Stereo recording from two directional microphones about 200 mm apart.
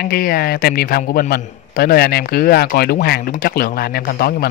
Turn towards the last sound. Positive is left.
turn(degrees=50)  # may be behind; listen again after turning